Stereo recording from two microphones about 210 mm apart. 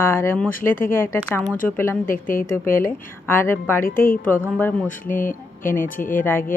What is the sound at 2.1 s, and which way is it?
Speech, 40° left (ahead or behind).